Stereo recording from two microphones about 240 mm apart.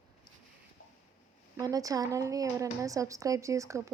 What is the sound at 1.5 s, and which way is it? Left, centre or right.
A woman's voice, centre.